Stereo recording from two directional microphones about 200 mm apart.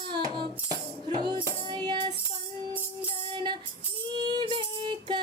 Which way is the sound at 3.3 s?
25° right (ahead or behind).